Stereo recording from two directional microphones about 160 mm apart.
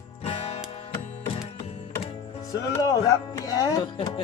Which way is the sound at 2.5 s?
20° left (ahead or behind).